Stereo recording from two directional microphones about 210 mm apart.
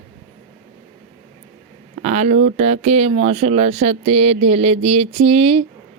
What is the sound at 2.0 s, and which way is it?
Speech, 35° right (ahead or behind).